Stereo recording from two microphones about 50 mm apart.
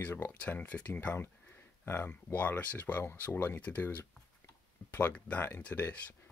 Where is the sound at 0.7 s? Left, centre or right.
Left.